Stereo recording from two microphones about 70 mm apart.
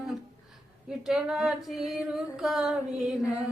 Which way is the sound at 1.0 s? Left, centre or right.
Centre.